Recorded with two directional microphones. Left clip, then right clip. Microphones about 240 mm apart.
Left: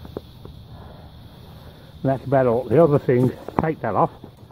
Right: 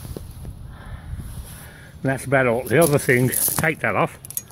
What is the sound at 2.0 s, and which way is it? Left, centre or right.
Speech, centre.